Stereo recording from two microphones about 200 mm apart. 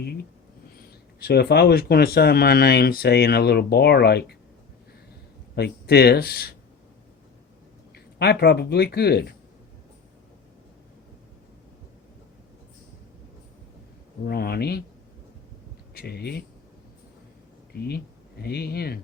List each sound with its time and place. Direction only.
1.2 s speech: 55° left (ahead or behind)
5.5 s speech: 55° left (ahead or behind)
7.9 s speech: 55° left (ahead or behind)
14.3 s speech: 50° left (ahead or behind)
16.0 s speech: 55° left (ahead or behind)
18.4 s speech: 50° left (ahead or behind)